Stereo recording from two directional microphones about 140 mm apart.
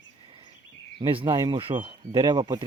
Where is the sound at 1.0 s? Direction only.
35° right (ahead or behind).